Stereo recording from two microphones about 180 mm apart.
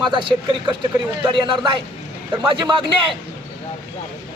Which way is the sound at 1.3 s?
25° right (ahead or behind).